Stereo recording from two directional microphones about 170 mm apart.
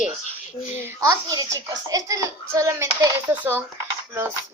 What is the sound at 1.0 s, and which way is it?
A child's voice, 20° right (ahead or behind).